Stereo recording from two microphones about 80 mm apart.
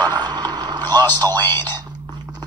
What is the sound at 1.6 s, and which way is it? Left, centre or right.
Whispering, right.